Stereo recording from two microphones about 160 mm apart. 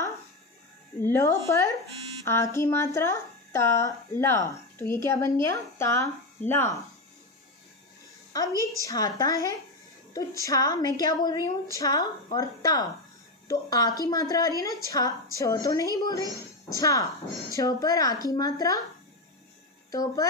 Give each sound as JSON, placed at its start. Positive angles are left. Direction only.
{"t": 0.9, "sound": "a sound", "side_deg": 15}
{"t": 2.2, "sound": "speech", "side_deg": 15}
{"t": 8.8, "sound": "a woman's voice", "side_deg": 25}
{"t": 19.9, "sound": "a woman's voice", "side_deg": 20}